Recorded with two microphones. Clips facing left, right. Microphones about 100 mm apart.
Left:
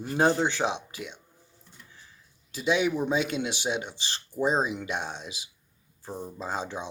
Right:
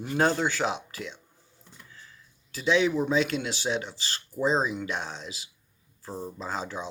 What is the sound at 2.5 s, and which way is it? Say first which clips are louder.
Speech: right 1 dB; 20° left (ahead or behind).